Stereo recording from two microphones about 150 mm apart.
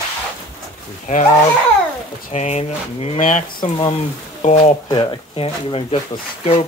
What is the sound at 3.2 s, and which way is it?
Speech, 60° left (ahead or behind).